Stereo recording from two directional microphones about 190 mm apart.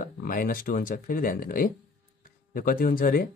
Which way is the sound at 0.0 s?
45° left (ahead or behind).